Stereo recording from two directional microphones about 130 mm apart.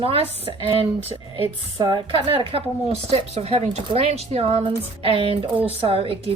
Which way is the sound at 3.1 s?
55° right (ahead or behind).